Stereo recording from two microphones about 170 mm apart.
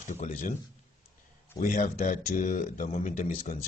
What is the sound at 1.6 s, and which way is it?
Speech, 50° left (ahead or behind).